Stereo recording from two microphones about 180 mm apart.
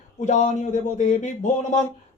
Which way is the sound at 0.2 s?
40° left (ahead or behind).